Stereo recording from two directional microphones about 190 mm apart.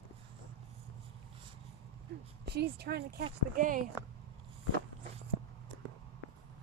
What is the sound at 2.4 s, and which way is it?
Speech, 60° right (ahead or behind).